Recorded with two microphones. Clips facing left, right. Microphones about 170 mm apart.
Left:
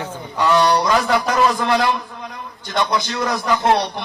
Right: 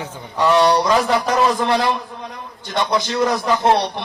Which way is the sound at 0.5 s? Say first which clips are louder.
Right 1 dB; 30° right (ahead or behind).